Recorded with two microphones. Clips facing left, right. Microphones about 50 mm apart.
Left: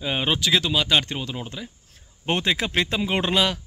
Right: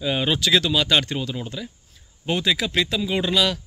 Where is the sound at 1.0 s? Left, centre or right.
Left.